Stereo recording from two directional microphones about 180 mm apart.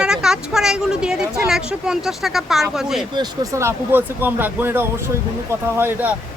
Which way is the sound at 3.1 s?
15° right (ahead or behind).